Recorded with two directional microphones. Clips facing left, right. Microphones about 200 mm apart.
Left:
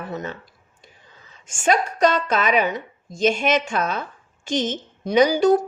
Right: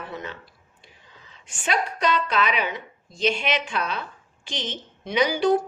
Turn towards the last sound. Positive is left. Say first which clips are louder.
# left 5 dB
turn(degrees=40)  # may be behind; listen again after turning